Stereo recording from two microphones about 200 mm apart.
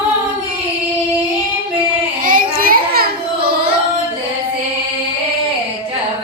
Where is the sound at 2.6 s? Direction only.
50° right (ahead or behind).